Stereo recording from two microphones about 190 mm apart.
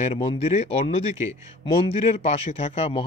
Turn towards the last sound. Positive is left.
turn(degrees=30)  # may be behind; listen again after turning